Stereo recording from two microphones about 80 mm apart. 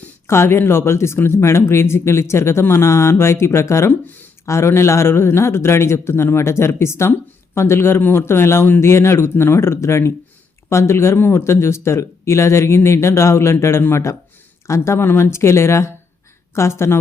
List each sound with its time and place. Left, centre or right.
0.3 s a man's voice: left